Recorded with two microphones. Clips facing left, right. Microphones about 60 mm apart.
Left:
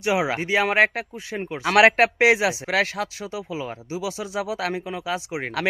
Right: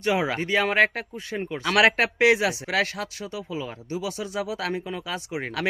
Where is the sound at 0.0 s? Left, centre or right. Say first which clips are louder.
Left 2 dB; centre.